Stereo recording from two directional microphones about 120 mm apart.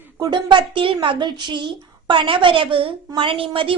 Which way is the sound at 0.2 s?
40° right (ahead or behind).